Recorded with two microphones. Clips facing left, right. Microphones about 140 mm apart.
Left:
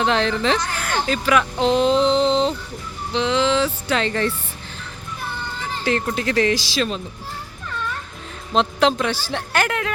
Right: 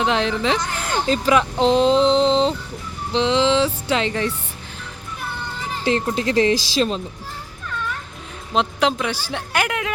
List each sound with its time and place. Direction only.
0.0 s speech: 15° right (ahead or behind)
5.8 s speech: 25° right (ahead or behind)
8.5 s a woman's voice: 10° right (ahead or behind)